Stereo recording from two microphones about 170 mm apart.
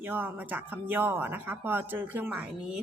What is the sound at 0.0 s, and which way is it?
A woman's voice, 10° right (ahead or behind).